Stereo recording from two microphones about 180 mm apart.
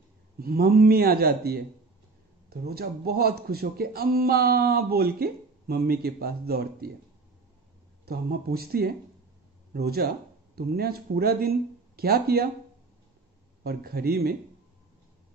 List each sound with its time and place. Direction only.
0.4 s speech: 60° right (ahead or behind)
8.0 s speech: 60° right (ahead or behind)
13.7 s speech: 60° right (ahead or behind)